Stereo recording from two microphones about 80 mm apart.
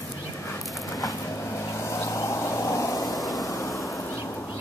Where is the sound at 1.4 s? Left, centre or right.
Left.